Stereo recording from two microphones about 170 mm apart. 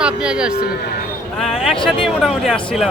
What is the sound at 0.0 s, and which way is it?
A man's voice, 5° right (ahead or behind).